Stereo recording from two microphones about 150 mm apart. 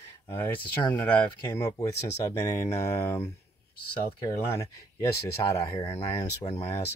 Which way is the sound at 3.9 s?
30° left (ahead or behind).